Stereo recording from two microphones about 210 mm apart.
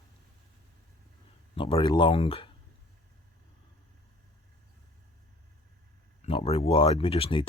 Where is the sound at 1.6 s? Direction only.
25° left (ahead or behind).